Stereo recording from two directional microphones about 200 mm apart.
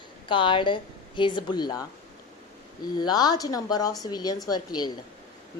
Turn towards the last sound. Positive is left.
turn(degrees=20)  # may be behind; listen again after turning